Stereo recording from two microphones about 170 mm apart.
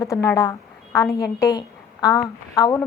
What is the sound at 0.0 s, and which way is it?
A woman's voice, 20° left (ahead or behind).